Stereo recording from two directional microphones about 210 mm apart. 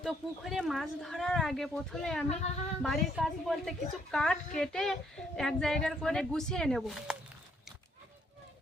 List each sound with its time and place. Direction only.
0.0 s a woman's voice: centre (ahead or behind)